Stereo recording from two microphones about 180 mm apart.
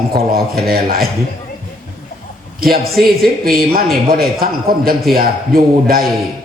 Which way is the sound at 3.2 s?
55° right (ahead or behind).